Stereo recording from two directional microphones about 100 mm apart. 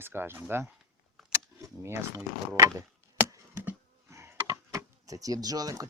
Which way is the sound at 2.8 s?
25° right (ahead or behind).